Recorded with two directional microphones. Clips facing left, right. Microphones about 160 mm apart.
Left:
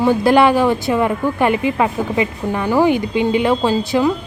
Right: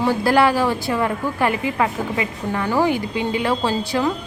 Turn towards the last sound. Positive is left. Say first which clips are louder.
# left 5 dB
turn(degrees=15)  # may be behind; listen again after turning